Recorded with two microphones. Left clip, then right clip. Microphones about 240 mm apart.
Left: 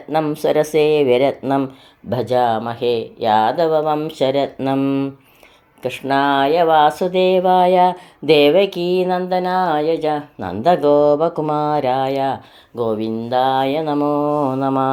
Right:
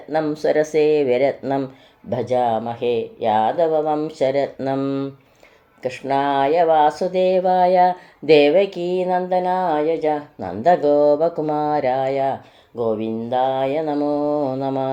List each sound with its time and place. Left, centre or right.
0.1 s speech: left
8.8 s speech: left